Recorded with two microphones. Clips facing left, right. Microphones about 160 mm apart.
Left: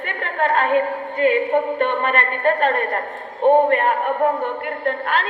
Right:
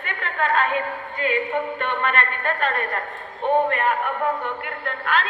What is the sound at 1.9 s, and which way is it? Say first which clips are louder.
A woman's voice: left 3 dB; 50° left (ahead or behind).